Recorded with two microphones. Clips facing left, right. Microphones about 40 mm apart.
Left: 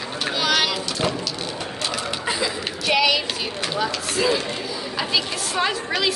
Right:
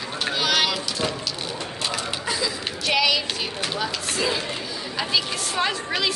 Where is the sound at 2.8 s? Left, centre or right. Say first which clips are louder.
Left 2 dB; centre.